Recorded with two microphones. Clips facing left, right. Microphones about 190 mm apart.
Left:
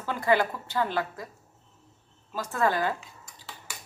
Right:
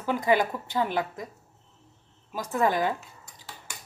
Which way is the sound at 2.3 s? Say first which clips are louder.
Right 1 dB; 15° right (ahead or behind).